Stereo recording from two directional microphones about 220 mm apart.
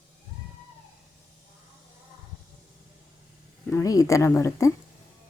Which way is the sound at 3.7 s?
15° left (ahead or behind).